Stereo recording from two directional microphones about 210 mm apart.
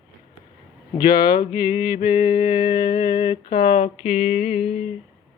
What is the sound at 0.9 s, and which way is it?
Mantra, 20° left (ahead or behind).